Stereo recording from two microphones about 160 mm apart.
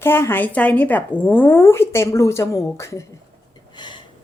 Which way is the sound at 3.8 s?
30° left (ahead or behind).